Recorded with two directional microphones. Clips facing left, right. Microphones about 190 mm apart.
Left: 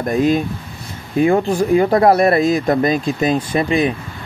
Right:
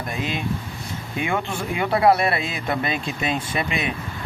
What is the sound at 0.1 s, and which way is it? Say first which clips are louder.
Speech: left 12 dB; 45° left (ahead or behind).